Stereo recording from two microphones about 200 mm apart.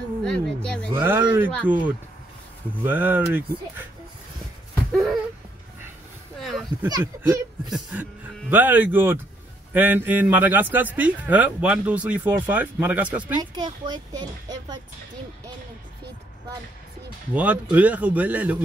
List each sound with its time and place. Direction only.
0.2 s a sound: 5° left (ahead or behind)
0.9 s speech: 10° right (ahead or behind)
6.4 s a sound: centre (ahead or behind)
6.9 s speech: 20° right (ahead or behind)
7.7 s speech: centre (ahead or behind)
13.4 s speech: 20° right (ahead or behind)
17.3 s speech: 5° right (ahead or behind)